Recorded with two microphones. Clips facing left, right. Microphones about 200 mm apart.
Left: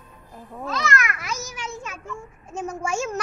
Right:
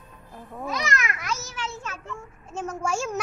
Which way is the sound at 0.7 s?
15° right (ahead or behind).